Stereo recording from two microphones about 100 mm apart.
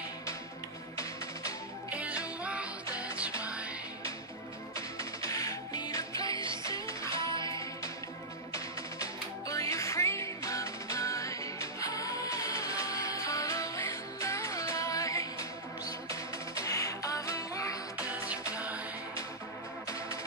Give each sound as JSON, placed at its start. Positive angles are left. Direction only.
{"t": 1.9, "sound": "music", "side_deg": -15}
{"t": 4.7, "sound": "music", "side_deg": 35}
{"t": 7.2, "sound": "music", "side_deg": -55}
{"t": 7.4, "sound": "music", "side_deg": 35}
{"t": 18.5, "sound": "music", "side_deg": -15}